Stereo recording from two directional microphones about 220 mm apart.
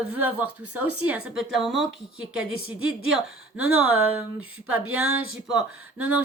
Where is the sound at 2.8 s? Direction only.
70° right (ahead or behind).